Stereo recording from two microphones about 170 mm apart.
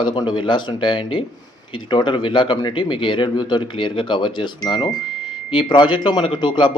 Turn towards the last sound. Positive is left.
turn(degrees=30)  # may be behind; listen again after turning